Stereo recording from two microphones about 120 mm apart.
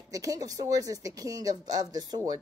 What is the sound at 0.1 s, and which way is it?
A woman's voice, 30° right (ahead or behind).